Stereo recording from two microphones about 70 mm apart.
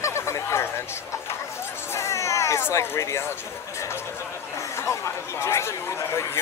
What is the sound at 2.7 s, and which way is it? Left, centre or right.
Speech, left.